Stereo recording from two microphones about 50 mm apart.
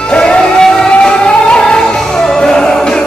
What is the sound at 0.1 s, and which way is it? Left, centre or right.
Music, centre.